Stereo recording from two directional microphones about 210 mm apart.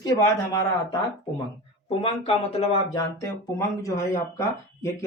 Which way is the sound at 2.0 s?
30° left (ahead or behind).